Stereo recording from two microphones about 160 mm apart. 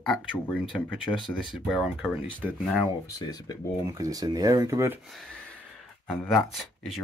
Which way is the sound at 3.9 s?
20° right (ahead or behind).